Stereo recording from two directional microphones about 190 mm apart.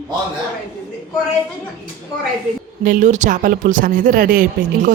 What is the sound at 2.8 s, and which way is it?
Speech, 45° right (ahead or behind).